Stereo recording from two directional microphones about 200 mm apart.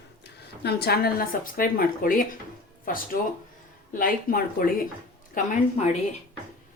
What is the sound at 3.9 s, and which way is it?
A woman's voice, 45° left (ahead or behind).